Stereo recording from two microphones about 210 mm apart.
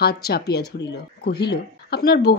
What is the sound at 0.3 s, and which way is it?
Speech, 50° left (ahead or behind).